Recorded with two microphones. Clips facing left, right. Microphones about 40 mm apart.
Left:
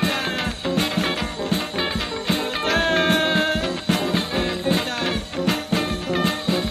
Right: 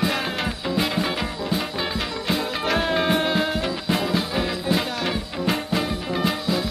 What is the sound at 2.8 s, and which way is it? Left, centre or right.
Music, left.